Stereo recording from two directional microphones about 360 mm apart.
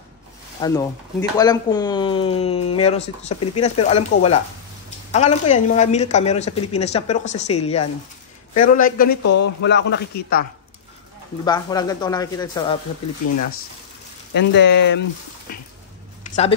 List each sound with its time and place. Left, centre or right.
0.6 s a man's voice: centre; by 10.4 s left
11.4 s speech: centre
14.3 s a man's voice: left